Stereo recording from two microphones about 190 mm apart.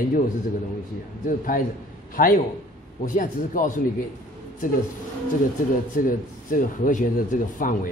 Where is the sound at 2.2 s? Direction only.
50° left (ahead or behind).